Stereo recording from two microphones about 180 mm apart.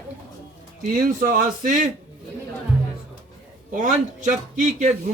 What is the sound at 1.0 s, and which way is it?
Speech, 50° right (ahead or behind).